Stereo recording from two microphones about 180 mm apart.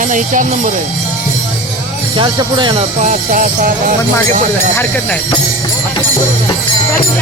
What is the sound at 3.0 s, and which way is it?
Music, 45° right (ahead or behind).